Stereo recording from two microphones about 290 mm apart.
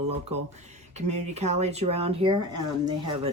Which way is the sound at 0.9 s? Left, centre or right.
Right.